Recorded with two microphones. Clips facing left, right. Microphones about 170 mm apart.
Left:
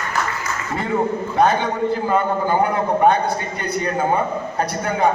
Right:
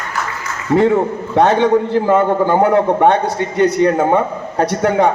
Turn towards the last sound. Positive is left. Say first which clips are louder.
# right 6 dB
turn(degrees=-85)